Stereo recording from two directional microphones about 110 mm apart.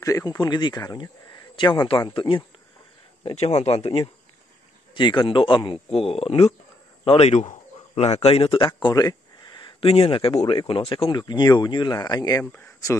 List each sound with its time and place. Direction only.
0.0 s speech: 30° left (ahead or behind); by 2.4 s 50° left (ahead or behind)
3.3 s speech: 70° left (ahead or behind)
4.9 s speech: 45° left (ahead or behind)
5.9 s speech: 60° left (ahead or behind)
7.1 s a man's voice: 75° left (ahead or behind); by 8.7 s 50° left (ahead or behind)
8.8 s a sound: 35° left (ahead or behind)
9.8 s speech: 60° left (ahead or behind); by 12.4 s 35° left (ahead or behind)